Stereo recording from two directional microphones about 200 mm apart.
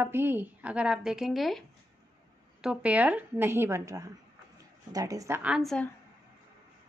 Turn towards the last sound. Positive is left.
turn(degrees=5)  # may be behind; listen again after turning